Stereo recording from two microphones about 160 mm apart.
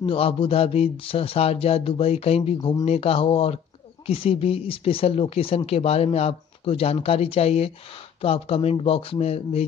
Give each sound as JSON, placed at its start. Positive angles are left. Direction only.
{"t": 0.0, "sound": "speech", "side_deg": 35}